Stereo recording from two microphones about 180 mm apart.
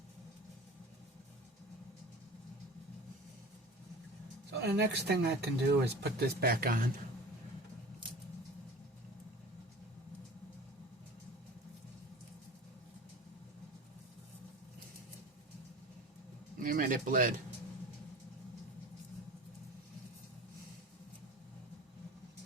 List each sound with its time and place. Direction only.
4.5 s speech: 65° right (ahead or behind)
16.6 s bird: 50° right (ahead or behind)